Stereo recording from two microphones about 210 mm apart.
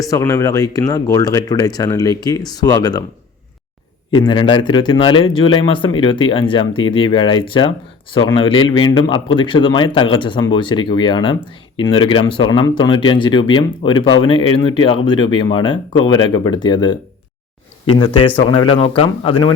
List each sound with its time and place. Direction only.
0.0 s speech: 15° left (ahead or behind)
4.1 s speech: 20° left (ahead or behind)